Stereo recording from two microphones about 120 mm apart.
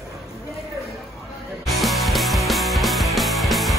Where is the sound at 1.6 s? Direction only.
Centre (ahead or behind).